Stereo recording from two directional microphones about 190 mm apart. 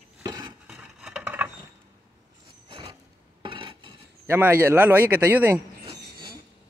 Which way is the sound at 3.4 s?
25° right (ahead or behind).